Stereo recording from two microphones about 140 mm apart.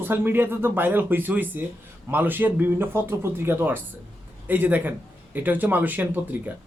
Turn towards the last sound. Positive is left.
turn(degrees=-10)  # may be behind; listen again after turning